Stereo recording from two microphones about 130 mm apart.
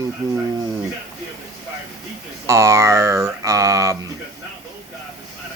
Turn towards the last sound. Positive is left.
turn(degrees=-25)  # may be behind; listen again after turning